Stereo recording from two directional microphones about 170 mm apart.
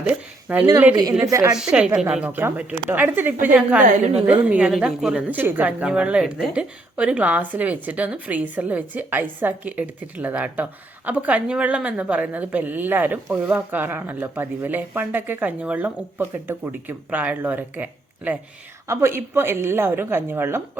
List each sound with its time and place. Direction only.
0.0 s a woman's voice: 10° right (ahead or behind)
1.5 s a woman's voice: 5° right (ahead or behind)
3.8 s a woman's voice: 45° right (ahead or behind)
4.3 s a woman's voice: 5° right (ahead or behind)